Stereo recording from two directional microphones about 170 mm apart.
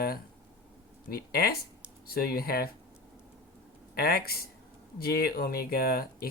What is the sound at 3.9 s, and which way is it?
Speech, 60° left (ahead or behind).